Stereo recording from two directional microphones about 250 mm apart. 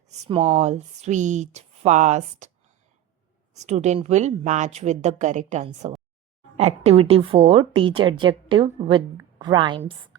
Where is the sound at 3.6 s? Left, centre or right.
Right.